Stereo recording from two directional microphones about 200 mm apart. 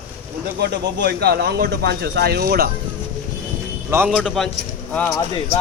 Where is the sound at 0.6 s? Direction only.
55° right (ahead or behind).